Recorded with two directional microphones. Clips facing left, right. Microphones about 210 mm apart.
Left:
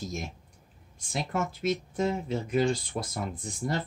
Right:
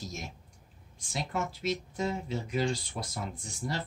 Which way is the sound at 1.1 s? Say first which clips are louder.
Left 3 dB; 50° left (ahead or behind).